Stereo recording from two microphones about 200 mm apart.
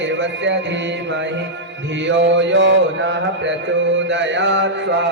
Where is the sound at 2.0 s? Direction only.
65° right (ahead or behind).